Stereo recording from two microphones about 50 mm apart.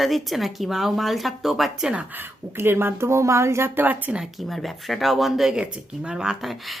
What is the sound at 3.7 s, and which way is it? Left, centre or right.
Speech, right.